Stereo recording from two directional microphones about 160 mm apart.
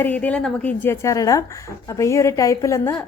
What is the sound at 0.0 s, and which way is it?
A woman's voice, 10° left (ahead or behind).